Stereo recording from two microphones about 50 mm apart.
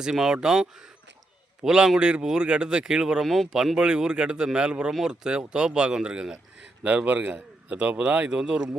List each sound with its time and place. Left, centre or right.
0.0 s speech: centre
3.2 s speech: centre
3.8 s a man's voice: centre